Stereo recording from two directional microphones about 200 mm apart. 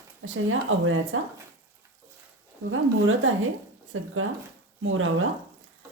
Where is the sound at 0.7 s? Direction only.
85° right.